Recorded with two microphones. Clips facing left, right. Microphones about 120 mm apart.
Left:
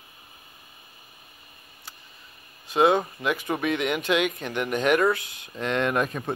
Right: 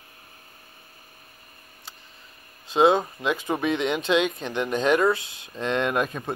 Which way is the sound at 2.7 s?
20° right (ahead or behind).